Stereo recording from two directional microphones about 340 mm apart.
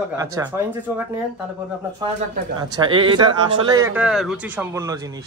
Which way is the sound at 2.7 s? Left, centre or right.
Centre.